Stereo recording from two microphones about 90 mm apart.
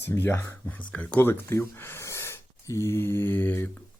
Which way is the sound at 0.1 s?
25° left (ahead or behind).